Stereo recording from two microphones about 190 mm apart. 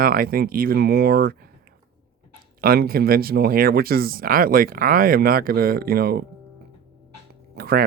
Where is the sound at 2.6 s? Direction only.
55° right (ahead or behind).